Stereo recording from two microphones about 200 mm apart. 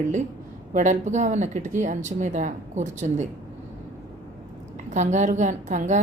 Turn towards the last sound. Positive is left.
turn(degrees=-35)  # may be behind; listen again after turning